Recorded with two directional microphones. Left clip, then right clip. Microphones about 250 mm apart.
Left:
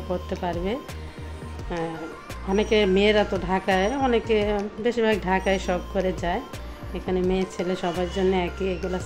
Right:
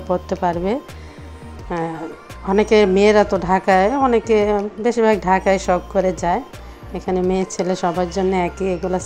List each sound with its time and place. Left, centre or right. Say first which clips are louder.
0.1 s a woman's voice: right 9 dB; right